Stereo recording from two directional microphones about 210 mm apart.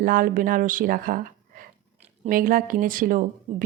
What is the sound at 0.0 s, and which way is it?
A woman's voice, 40° right (ahead or behind).